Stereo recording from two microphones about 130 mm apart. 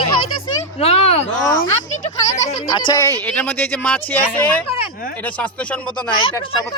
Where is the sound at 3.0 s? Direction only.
20° left (ahead or behind).